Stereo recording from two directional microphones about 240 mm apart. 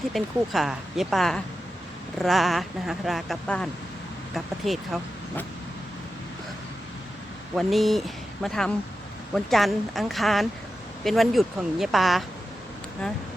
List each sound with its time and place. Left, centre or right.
0.1 s speech: centre
7.5 s speech: centre